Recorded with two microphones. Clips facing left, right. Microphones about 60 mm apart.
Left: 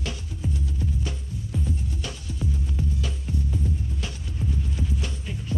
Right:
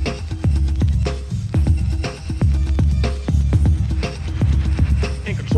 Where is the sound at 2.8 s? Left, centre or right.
Right.